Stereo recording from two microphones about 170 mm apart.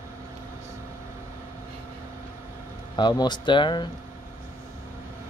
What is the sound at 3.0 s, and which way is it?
Speech, 25° left (ahead or behind).